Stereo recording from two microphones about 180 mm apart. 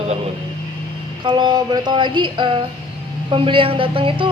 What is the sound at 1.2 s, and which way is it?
Speech, 25° right (ahead or behind).